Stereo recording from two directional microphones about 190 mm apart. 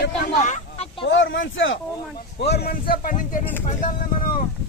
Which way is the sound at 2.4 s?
60° left (ahead or behind).